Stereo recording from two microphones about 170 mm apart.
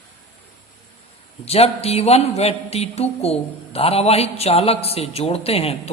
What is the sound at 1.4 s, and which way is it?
Speech, 35° left (ahead or behind).